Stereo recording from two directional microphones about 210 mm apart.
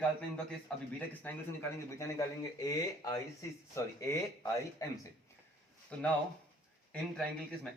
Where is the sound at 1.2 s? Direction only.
10° left (ahead or behind).